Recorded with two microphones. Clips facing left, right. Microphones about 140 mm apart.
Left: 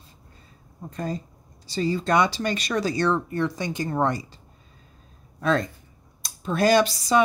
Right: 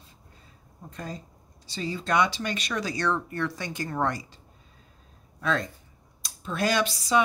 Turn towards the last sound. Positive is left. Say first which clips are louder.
# left 5 dB
turn(degrees=40)  # may be behind; listen again after turning